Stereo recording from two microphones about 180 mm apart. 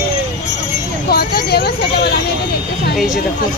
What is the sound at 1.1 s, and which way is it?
Speech, 60° left (ahead or behind).